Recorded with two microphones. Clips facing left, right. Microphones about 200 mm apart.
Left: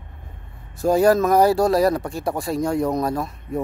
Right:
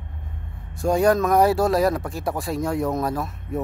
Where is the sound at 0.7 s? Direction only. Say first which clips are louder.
Left 2 dB; centre (ahead or behind).